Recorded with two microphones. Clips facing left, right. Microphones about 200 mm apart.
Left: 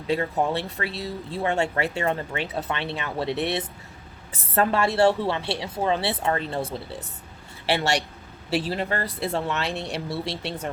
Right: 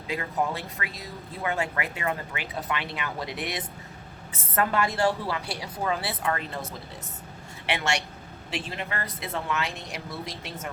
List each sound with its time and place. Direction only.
0.1 s speech: 30° left (ahead or behind)